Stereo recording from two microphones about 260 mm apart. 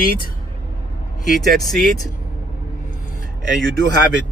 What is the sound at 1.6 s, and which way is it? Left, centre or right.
Speech, centre.